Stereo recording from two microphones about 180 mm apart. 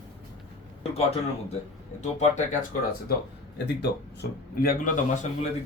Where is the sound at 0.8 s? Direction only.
35° left (ahead or behind).